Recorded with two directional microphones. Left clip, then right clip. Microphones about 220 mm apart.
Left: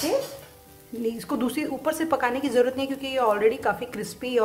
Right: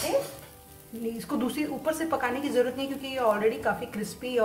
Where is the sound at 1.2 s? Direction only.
50° left (ahead or behind).